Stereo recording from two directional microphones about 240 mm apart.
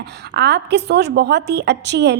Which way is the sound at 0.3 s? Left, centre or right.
Right.